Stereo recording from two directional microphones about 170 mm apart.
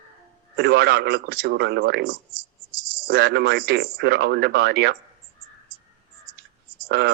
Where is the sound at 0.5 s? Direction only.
75° right (ahead or behind).